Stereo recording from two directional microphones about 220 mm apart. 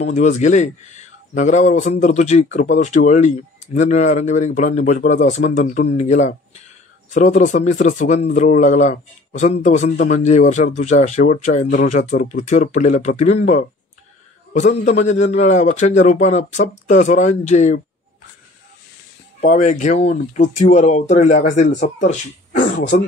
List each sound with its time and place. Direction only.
0.0 s speech: 35° left (ahead or behind)
19.4 s speech: 35° left (ahead or behind)